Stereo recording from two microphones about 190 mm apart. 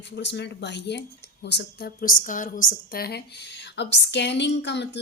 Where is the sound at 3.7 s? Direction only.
65° left (ahead or behind).